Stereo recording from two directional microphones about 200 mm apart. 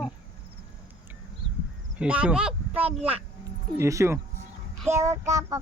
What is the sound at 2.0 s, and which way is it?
Speech, 5° right (ahead or behind).